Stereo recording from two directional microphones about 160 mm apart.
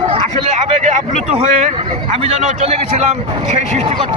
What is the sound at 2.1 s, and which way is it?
Speech, 40° right (ahead or behind).